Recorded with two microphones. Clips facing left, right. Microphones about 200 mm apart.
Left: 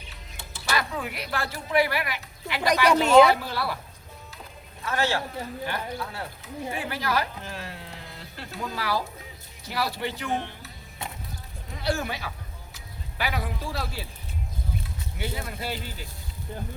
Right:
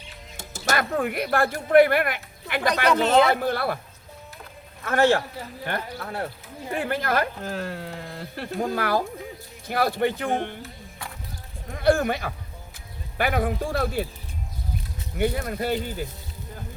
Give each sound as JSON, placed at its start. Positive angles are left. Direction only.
{"t": 0.3, "sound": "speech", "side_deg": -45}
{"t": 4.8, "sound": "speech", "side_deg": -55}
{"t": 11.7, "sound": "speech", "side_deg": -55}
{"t": 15.2, "sound": "speech", "side_deg": -50}